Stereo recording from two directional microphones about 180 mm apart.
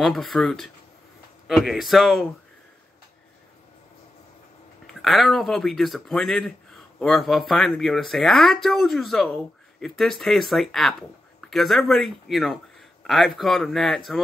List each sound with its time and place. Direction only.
0.0 s speech: centre (ahead or behind)
5.0 s a man's voice: centre (ahead or behind)